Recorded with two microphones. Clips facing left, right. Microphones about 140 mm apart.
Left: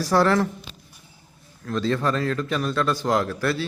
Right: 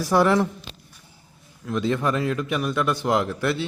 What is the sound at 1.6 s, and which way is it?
A man's voice, 15° right (ahead or behind).